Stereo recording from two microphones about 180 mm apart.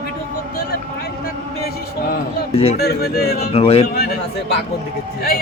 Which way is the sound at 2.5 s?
35° left (ahead or behind).